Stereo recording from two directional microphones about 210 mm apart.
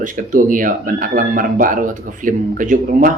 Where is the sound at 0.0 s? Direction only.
40° right (ahead or behind).